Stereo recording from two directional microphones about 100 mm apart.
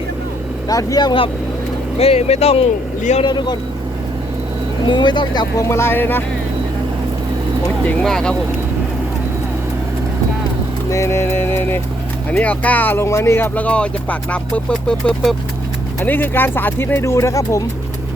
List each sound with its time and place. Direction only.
0.7 s speech: 35° left (ahead or behind)
2.0 s speech: 90° left
3.2 s speech: 45° left (ahead or behind)
4.9 s speech: 50° left (ahead or behind)
5.6 s speech: 25° left (ahead or behind)
8.0 s speech: 5° left (ahead or behind)
10.8 s music: 30° left (ahead or behind)
12.3 s speech: 15° left (ahead or behind)
16.0 s speech: 20° left (ahead or behind)